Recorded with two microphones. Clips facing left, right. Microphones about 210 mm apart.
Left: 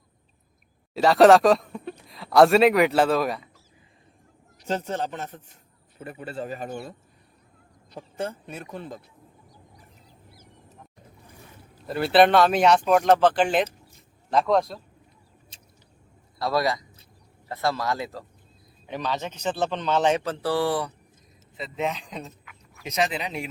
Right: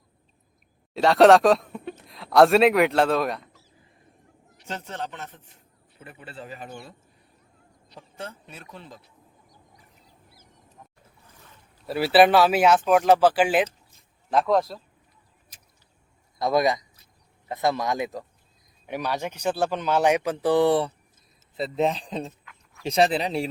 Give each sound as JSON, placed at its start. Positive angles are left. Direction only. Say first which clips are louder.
{"t": 0.9, "sound": "speech", "louder": "even", "side_deg": 0}
{"t": 4.5, "sound": "a man's voice", "louder": "left 7 dB", "side_deg": 40}
{"t": 11.9, "sound": "speech", "louder": "right 1 dB", "side_deg": -5}
{"t": 15.5, "sound": "a sound", "louder": "left 4 dB", "side_deg": 25}
{"t": 16.4, "sound": "speech", "louder": "right 3 dB", "side_deg": -20}
{"t": 21.5, "sound": "speech", "louder": "right 5 dB", "side_deg": -35}
{"t": 22.4, "sound": "a sound", "louder": "right 6 dB", "side_deg": 5}
{"t": 22.9, "sound": "speech", "louder": "right 5 dB", "side_deg": -35}